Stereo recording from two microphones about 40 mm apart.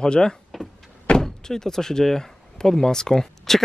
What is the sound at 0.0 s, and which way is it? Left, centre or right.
Speech, centre.